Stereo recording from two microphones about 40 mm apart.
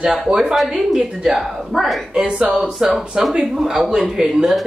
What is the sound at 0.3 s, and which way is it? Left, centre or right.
Speech, centre.